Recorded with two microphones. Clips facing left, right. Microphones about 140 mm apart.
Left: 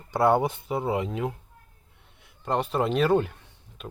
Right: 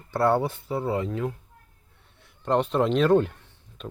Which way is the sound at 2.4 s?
Centre (ahead or behind).